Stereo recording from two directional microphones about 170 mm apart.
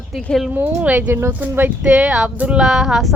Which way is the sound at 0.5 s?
10° right (ahead or behind).